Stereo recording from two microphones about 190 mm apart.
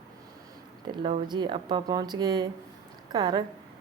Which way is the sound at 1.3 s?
25° right (ahead or behind).